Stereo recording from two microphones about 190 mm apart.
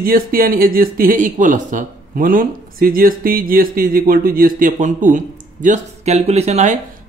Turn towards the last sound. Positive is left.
turn(degrees=-35)  # may be behind; listen again after turning